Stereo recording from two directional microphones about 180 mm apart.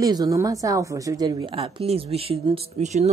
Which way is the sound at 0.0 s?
20° right (ahead or behind).